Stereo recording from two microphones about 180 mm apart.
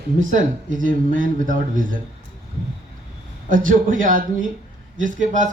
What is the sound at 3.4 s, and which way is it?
Speech, 50° right (ahead or behind).